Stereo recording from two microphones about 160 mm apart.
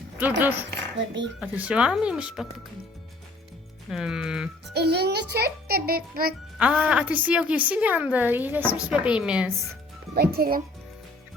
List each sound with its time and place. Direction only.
0.2 s a woman's voice: 10° right (ahead or behind)
3.8 s speech: centre (ahead or behind)
4.7 s a child's voice: 90° right; by 6.3 s 70° right (ahead or behind)
6.6 s a woman's voice: 5° right (ahead or behind)
10.2 s a child's voice: 70° right (ahead or behind)